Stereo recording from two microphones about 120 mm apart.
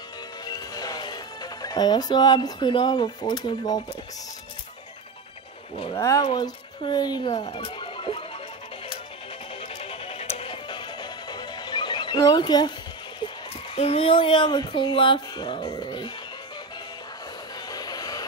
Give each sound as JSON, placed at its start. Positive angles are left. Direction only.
{"t": 0.5, "sound": "speech", "side_deg": 35}
{"t": 5.9, "sound": "speech", "side_deg": 25}
{"t": 6.3, "sound": "a woman's voice", "side_deg": 40}
{"t": 7.4, "sound": "music", "side_deg": 45}
{"t": 9.6, "sound": "music", "side_deg": 50}
{"t": 13.7, "sound": "speech", "side_deg": 55}
{"t": 17.6, "sound": "music", "side_deg": 35}